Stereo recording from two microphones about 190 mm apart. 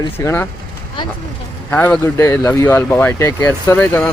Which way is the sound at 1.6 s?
10° left (ahead or behind).